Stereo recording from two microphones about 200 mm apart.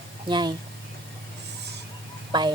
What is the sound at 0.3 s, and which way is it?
Speech, 20° right (ahead or behind).